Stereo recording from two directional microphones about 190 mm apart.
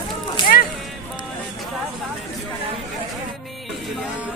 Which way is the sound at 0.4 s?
25° left (ahead or behind).